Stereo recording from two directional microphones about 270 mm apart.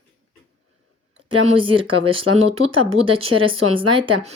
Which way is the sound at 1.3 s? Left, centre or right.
Centre.